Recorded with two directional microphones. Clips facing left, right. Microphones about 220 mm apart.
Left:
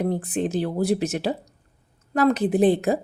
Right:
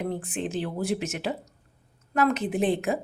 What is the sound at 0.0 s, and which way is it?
A woman's voice, 40° left (ahead or behind).